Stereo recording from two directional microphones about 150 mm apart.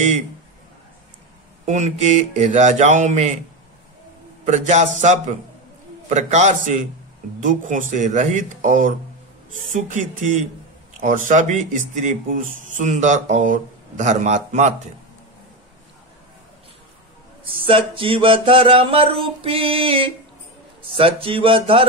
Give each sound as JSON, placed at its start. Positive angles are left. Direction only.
{"t": 1.7, "sound": "speech", "side_deg": -50}
{"t": 4.5, "sound": "speech", "side_deg": -50}
{"t": 17.6, "sound": "a sound", "side_deg": -35}